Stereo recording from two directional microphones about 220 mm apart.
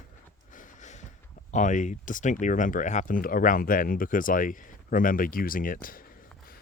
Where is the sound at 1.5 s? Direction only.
35° left (ahead or behind).